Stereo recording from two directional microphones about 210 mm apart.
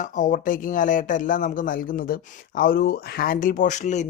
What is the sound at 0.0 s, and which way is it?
Speech, 40° left (ahead or behind).